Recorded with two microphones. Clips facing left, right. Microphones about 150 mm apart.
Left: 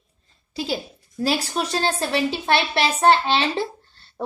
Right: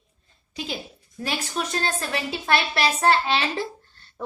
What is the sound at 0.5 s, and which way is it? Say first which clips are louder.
A woman's voice: left 6 dB; 35° left (ahead or behind).